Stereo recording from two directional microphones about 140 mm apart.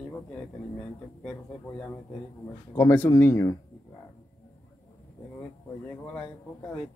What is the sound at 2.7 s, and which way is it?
Speech, 15° left (ahead or behind).